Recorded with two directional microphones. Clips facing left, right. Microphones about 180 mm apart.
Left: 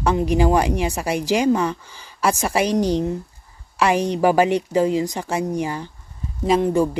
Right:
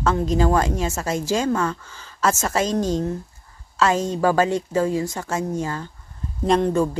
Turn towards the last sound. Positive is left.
turn(degrees=5)  # may be behind; listen again after turning